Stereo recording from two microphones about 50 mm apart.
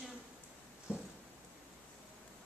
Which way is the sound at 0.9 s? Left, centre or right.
Right.